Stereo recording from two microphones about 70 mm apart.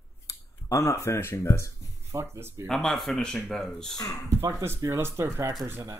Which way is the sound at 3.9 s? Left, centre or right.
Left.